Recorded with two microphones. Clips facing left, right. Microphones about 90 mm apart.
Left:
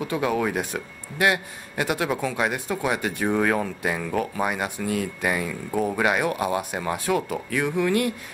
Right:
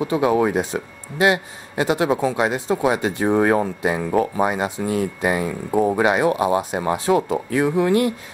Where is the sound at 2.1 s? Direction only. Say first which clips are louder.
Right 5 dB; 20° right (ahead or behind).